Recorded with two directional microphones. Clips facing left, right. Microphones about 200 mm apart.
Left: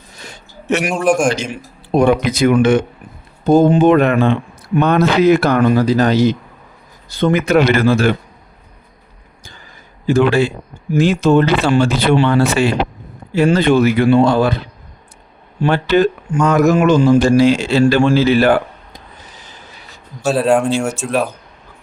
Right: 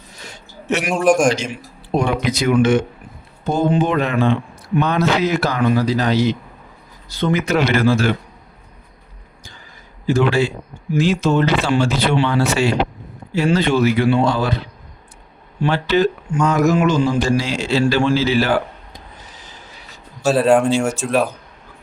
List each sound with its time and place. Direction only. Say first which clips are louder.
0.9 s speech: right 1 dB; centre (ahead or behind)
2.0 s speech: left 7 dB; 55° left (ahead or behind)
3.4 s speech: left 7 dB; 40° left (ahead or behind)
10.1 s speech: left 4 dB; 55° left (ahead or behind)
15.6 s speech: left 3 dB; 55° left (ahead or behind)
20.2 s speech: even; centre (ahead or behind)